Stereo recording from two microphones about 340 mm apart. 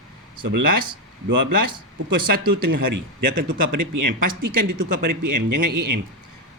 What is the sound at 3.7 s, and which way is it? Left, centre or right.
A man's voice, right.